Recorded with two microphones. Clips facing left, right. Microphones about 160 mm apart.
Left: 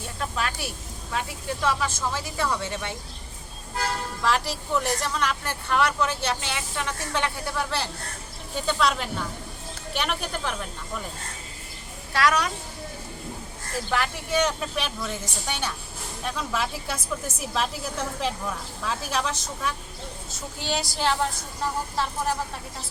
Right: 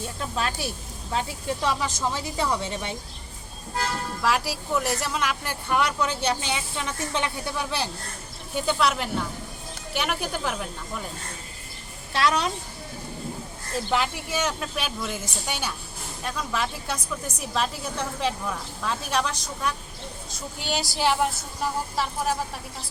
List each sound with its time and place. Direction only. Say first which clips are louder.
0.2 s speech: even; 30° right (ahead or behind)
4.2 s a woman's voice: even; 5° right (ahead or behind)
12.1 s speech: left 1 dB; 25° right (ahead or behind)
14.3 s a woman's voice: left 4 dB; 5° right (ahead or behind)